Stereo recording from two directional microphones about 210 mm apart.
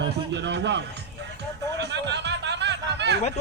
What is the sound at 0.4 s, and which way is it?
Speech, 55° right (ahead or behind).